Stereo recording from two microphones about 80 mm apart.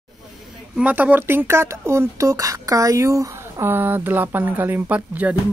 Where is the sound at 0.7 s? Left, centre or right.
Centre; by 3.6 s right.